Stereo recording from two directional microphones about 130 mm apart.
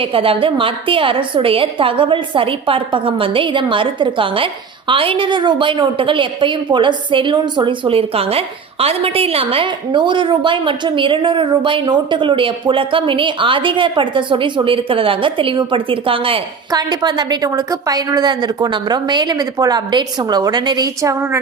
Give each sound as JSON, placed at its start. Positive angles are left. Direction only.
{"t": 0.0, "sound": "a woman's voice", "side_deg": -45}